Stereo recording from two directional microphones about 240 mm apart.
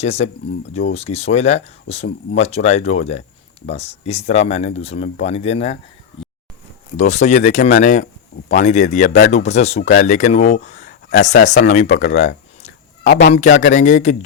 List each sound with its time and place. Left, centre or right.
0.0 s speech: left
6.9 s speech: left